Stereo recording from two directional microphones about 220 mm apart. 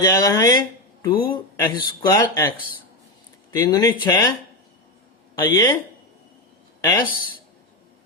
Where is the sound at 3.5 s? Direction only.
15° left (ahead or behind).